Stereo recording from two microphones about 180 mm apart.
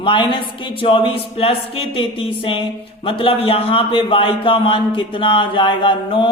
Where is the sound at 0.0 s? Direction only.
25° left (ahead or behind).